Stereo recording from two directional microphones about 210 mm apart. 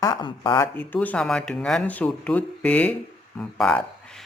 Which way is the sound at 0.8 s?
5° left (ahead or behind).